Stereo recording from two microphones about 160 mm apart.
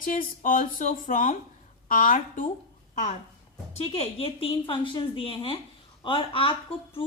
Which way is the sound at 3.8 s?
40° left (ahead or behind).